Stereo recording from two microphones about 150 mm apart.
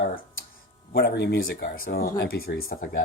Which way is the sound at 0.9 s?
90° left.